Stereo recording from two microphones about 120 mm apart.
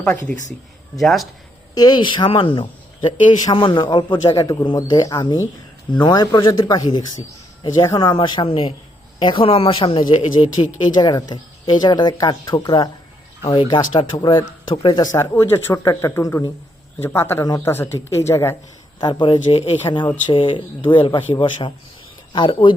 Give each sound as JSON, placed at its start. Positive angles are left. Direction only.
{"t": 0.0, "sound": "speech", "side_deg": 10}
{"t": 1.7, "sound": "speech", "side_deg": 35}
{"t": 10.8, "sound": "speech", "side_deg": 35}
{"t": 15.1, "sound": "speech", "side_deg": 25}
{"t": 18.9, "sound": "speech", "side_deg": 40}